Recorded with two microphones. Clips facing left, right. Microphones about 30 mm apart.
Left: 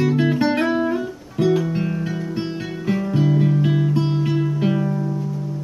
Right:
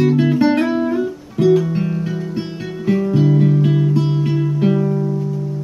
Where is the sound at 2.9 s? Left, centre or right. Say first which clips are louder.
Right 4 dB; centre.